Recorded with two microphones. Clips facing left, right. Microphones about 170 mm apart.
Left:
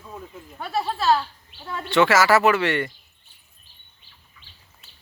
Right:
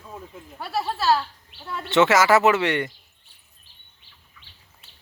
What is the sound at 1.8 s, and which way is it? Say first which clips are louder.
Speech: even; 20° right (ahead or behind).